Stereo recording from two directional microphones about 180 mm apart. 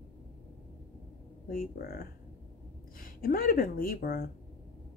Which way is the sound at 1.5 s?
55° left (ahead or behind).